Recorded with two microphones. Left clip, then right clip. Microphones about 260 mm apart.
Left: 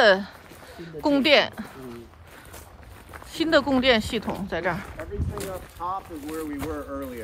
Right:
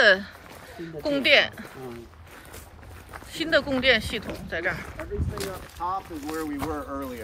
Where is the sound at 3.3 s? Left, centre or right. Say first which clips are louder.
Left 3 dB; centre.